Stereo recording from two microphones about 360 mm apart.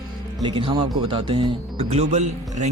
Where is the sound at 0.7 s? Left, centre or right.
Centre.